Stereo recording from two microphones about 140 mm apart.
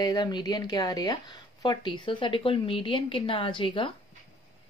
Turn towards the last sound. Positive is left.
turn(degrees=40)  # may be behind; listen again after turning